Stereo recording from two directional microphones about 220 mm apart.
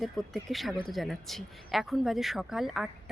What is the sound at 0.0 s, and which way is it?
Speech, centre (ahead or behind).